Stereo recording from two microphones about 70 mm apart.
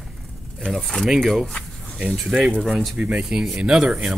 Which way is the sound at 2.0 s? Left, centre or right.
Centre.